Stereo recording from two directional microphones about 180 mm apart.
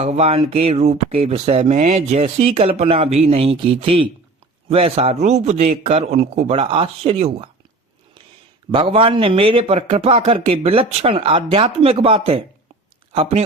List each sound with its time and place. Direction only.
0.0 s speech: 35° right (ahead or behind)
8.7 s speech: 30° right (ahead or behind)